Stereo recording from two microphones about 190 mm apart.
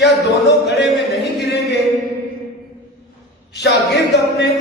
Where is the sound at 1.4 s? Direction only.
65° left (ahead or behind).